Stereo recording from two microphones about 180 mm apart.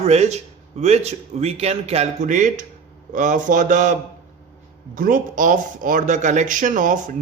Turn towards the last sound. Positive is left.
turn(degrees=-45)  # may be behind; listen again after turning